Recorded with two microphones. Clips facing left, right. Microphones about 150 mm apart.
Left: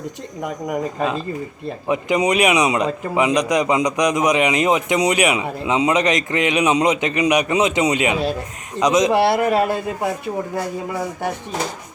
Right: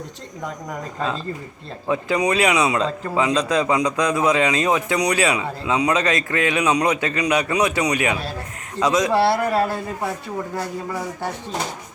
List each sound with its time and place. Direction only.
0.7 s a man's voice: 15° left (ahead or behind)